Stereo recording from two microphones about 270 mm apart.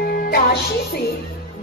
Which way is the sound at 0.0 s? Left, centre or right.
Left.